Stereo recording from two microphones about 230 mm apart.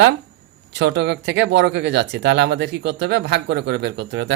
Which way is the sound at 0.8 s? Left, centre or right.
Right.